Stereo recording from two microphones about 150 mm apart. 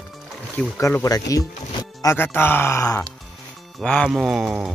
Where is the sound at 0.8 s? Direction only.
20° left (ahead or behind).